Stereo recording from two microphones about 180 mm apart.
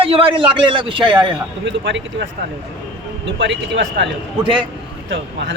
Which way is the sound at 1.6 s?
90° right.